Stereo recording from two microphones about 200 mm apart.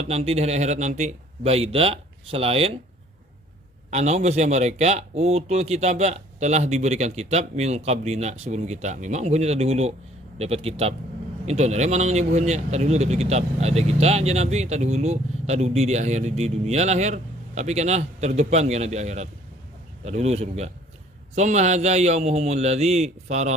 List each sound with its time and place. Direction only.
0.0 s speech: 30° right (ahead or behind)
3.9 s speech: 35° right (ahead or behind)